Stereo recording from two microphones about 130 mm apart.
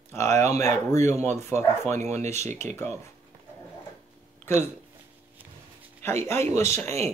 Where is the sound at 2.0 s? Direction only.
60° right (ahead or behind).